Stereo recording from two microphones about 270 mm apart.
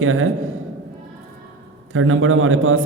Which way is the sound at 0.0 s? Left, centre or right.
Right.